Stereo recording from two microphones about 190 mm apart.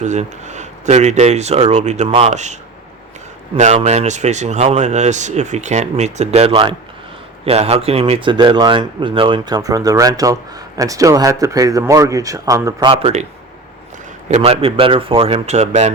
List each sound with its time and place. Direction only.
0.0 s speech: 40° right (ahead or behind)
3.8 s speech: 35° right (ahead or behind); by 12.9 s 15° right (ahead or behind)
12.9 s speech: 30° right (ahead or behind)
14.3 s speech: 35° right (ahead or behind)